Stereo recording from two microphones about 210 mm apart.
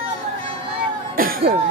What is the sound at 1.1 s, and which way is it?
Cough, 45° right (ahead or behind).